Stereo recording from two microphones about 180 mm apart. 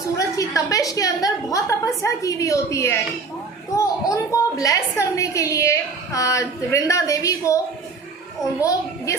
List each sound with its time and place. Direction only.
0.2 s a woman's voice: 20° left (ahead or behind)
9.1 s speech: 15° left (ahead or behind)